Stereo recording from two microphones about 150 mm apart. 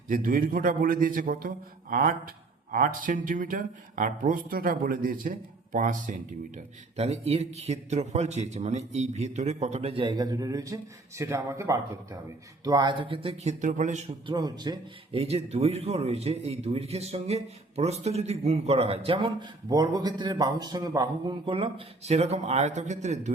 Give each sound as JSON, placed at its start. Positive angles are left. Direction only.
{"t": 0.1, "sound": "a man's voice", "side_deg": -70}
{"t": 6.9, "sound": "a man's voice", "side_deg": -45}
{"t": 14.3, "sound": "a man's voice", "side_deg": -25}
{"t": 15.1, "sound": "a man's voice", "side_deg": -40}